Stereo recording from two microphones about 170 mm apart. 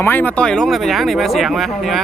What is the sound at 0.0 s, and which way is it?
Speech, 10° left (ahead or behind).